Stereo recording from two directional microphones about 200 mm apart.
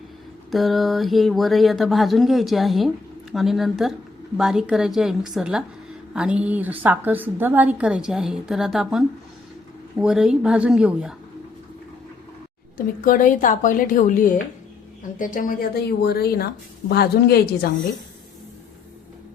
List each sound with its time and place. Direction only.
0.5 s speech: centre (ahead or behind)
12.7 s a woman's voice: 40° left (ahead or behind)